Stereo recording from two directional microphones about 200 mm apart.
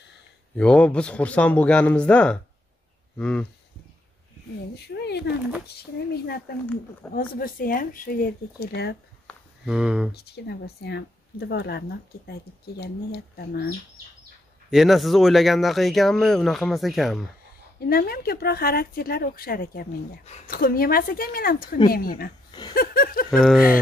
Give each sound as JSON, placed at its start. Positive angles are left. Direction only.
{"t": 0.6, "sound": "speech", "side_deg": 5}
{"t": 4.7, "sound": "a woman's voice", "side_deg": 55}
{"t": 6.6, "sound": "speech", "side_deg": 5}
{"t": 7.2, "sound": "speech", "side_deg": 45}
{"t": 9.3, "sound": "a sound", "side_deg": -5}
{"t": 10.1, "sound": "a woman's voice", "side_deg": 55}
{"t": 14.7, "sound": "speech", "side_deg": 0}
{"t": 17.7, "sound": "speech", "side_deg": 50}
{"t": 22.5, "sound": "speech", "side_deg": 20}
{"t": 22.8, "sound": "speech", "side_deg": 45}
{"t": 23.3, "sound": "speech", "side_deg": 0}